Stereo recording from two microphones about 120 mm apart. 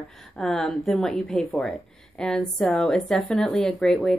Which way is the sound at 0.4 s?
5° left (ahead or behind).